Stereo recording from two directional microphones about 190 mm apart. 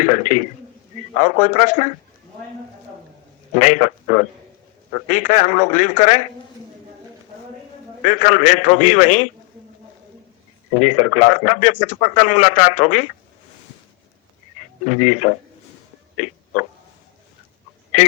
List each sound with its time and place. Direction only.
0.0 s a man's voice: 40° left (ahead or behind)
3.5 s speech: 35° left (ahead or behind)
8.0 s speech: 40° left (ahead or behind)
10.8 s speech: 35° left (ahead or behind)
12.7 s a man's voice: 40° left (ahead or behind)
14.8 s speech: 35° left (ahead or behind)